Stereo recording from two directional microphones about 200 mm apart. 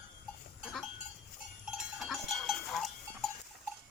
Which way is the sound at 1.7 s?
Centre (ahead or behind).